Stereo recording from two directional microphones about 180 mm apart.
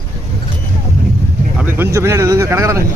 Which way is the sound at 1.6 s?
15° right (ahead or behind).